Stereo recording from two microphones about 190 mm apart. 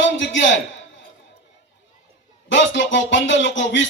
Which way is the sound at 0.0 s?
75° left (ahead or behind).